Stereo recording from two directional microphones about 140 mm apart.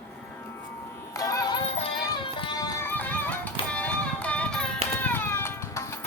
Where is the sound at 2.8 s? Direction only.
15° left (ahead or behind).